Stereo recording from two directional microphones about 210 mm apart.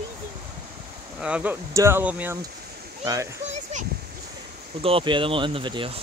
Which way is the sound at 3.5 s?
35° right (ahead or behind).